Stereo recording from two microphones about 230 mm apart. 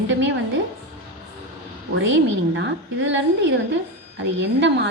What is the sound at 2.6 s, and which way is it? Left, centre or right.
A woman's voice, right.